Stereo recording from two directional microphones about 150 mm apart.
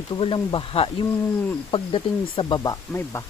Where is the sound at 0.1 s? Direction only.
35° left (ahead or behind).